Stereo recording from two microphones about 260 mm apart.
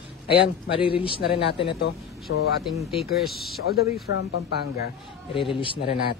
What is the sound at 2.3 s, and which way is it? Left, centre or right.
Speech, left.